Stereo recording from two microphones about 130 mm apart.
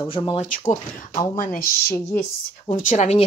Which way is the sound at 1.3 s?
90° left.